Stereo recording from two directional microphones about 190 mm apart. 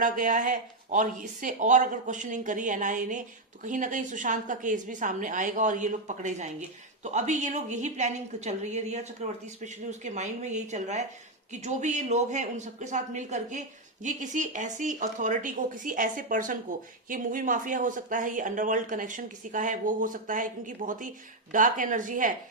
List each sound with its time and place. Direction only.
0.0 s speech: 45° right (ahead or behind)